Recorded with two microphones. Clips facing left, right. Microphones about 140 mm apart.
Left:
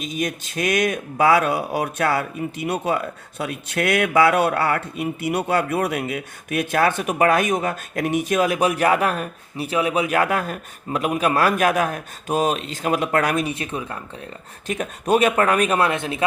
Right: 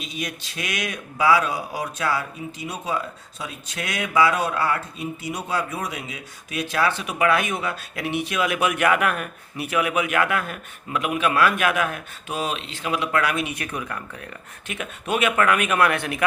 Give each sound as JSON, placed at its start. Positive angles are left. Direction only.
{"t": 0.0, "sound": "speech", "side_deg": 45}
{"t": 13.5, "sound": "speech", "side_deg": 25}
{"t": 14.7, "sound": "speech", "side_deg": 40}
{"t": 15.9, "sound": "speech", "side_deg": 25}